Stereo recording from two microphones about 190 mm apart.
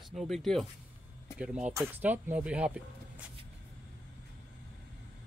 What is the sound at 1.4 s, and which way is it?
Speech, 5° right (ahead or behind).